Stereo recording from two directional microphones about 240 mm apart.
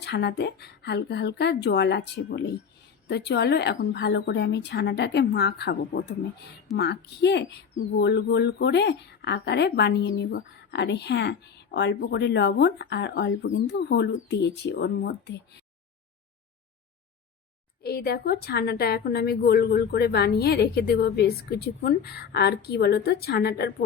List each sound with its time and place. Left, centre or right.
0.0 s speech: left
17.8 s a woman's voice: left